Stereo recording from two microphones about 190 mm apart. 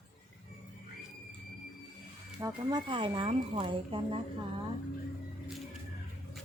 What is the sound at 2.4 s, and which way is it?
Speech, 20° right (ahead or behind).